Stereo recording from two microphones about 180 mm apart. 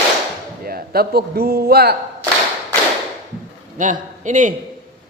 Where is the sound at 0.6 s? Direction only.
55° right (ahead or behind).